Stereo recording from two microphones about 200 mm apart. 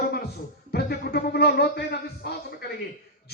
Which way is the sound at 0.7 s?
50° left (ahead or behind).